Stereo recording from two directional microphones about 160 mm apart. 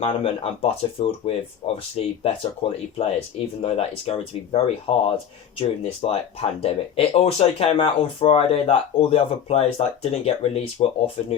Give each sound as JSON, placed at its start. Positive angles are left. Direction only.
{"t": 0.0, "sound": "speech", "side_deg": 35}